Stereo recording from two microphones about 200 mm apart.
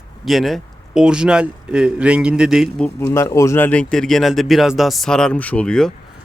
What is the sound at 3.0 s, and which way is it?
Speech, 15° left (ahead or behind).